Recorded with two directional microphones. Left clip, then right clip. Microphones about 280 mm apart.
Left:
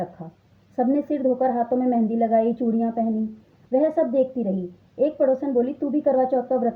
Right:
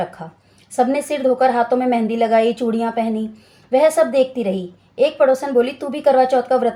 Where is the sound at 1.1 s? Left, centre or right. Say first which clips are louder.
Right 6 dB; right.